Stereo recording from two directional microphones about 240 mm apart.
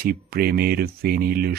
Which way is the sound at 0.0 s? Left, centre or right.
Right.